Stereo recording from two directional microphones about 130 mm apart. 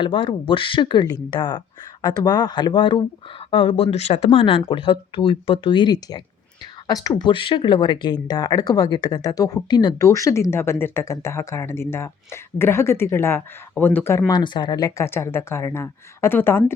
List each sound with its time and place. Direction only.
0.0 s speech: 40° left (ahead or behind); by 14.3 s 20° left (ahead or behind)
14.3 s speech: 35° left (ahead or behind); by 16.7 s 20° left (ahead or behind)